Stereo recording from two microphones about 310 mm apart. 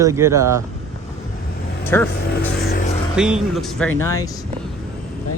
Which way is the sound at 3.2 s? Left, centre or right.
Centre.